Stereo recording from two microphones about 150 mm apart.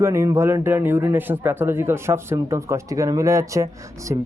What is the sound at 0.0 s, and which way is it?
Speech, 20° right (ahead or behind).